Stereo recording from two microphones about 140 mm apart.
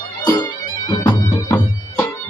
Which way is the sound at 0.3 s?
30° left (ahead or behind).